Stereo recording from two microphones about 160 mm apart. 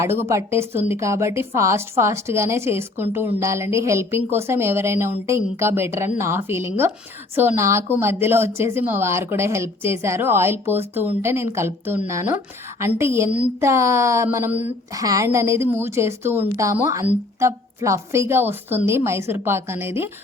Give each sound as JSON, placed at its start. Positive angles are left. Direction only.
{"t": 0.0, "sound": "a woman's voice", "side_deg": -15}